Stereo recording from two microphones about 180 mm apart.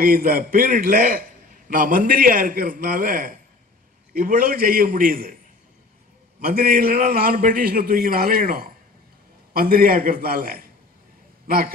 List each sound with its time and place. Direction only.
0.0 s a man's voice: 55° right (ahead or behind)
6.4 s a man's voice: 55° right (ahead or behind)